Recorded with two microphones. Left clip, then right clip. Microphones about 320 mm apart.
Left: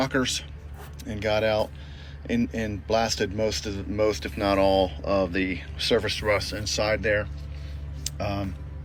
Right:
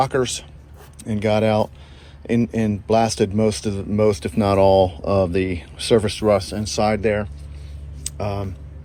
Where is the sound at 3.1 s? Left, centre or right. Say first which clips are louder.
Right 6 dB; centre.